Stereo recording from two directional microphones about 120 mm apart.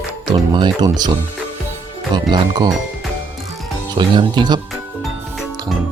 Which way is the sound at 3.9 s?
40° right (ahead or behind).